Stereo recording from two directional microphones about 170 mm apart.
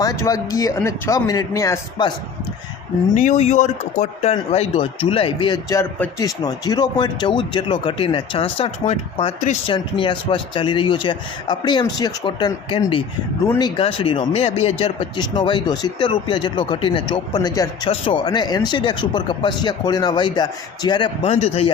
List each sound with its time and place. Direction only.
0.0 s speech: 20° left (ahead or behind)
3.2 s speech: 40° left (ahead or behind)
9.7 s speech: 30° left (ahead or behind)